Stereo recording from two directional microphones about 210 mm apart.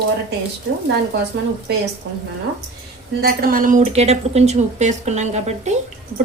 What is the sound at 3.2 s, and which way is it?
A woman's voice, 45° right (ahead or behind).